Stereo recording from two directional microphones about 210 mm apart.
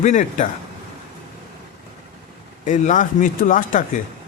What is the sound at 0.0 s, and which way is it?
Speech, 35° left (ahead or behind).